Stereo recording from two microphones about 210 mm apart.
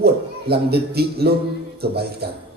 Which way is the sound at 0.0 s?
50° right (ahead or behind).